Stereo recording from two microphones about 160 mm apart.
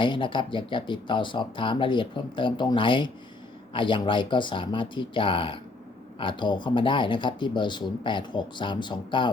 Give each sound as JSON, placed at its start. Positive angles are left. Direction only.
{"t": 0.0, "sound": "speech", "side_deg": 30}